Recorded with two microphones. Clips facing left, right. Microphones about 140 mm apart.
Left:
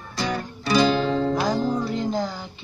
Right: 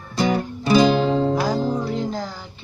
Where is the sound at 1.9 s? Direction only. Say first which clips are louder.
Left 1 dB; centre (ahead or behind).